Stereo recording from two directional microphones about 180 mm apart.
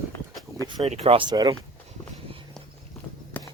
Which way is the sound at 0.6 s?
25° right (ahead or behind).